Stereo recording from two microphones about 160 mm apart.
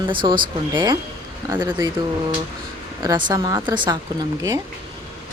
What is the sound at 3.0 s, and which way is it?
Speech, 25° right (ahead or behind).